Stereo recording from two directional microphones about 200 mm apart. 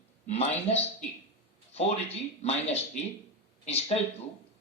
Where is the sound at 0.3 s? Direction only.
35° left (ahead or behind).